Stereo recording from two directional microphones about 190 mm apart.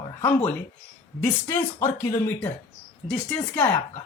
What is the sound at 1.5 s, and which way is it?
A woman's voice, 15° left (ahead or behind).